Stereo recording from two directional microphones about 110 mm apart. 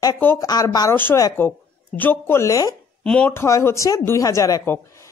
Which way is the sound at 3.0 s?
10° left (ahead or behind).